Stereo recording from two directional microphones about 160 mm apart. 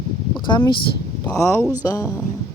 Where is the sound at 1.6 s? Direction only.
15° right (ahead or behind).